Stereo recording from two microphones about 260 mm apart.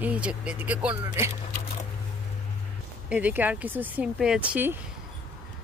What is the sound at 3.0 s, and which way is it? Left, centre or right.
Speech, centre.